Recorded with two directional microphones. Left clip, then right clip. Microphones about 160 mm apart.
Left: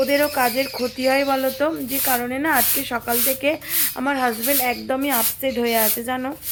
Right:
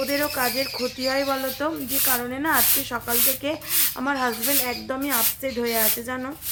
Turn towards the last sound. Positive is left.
turn(degrees=25)  # may be behind; listen again after turning